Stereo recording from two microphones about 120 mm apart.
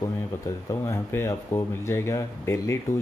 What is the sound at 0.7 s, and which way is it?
Speech, 25° left (ahead or behind).